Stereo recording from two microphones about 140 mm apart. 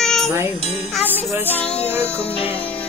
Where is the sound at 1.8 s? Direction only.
15° right (ahead or behind).